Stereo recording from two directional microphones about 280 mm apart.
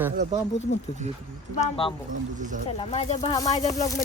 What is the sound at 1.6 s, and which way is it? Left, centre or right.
Speech, centre.